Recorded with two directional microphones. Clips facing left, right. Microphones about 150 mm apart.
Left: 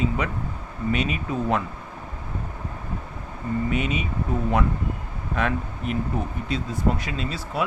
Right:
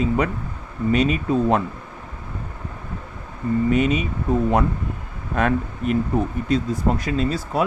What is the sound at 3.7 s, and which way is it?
Speech, 40° right (ahead or behind).